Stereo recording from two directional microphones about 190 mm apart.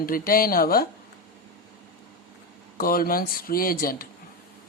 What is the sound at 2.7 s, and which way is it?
Speech, 50° left (ahead or behind).